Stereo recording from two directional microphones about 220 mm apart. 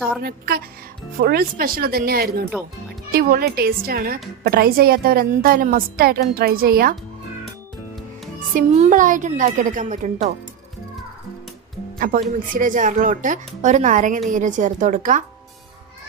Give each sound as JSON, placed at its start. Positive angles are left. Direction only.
{"t": 0.2, "sound": "a woman's voice", "side_deg": -45}
{"t": 8.5, "sound": "a woman's voice", "side_deg": -35}
{"t": 11.9, "sound": "a woman's voice", "side_deg": -40}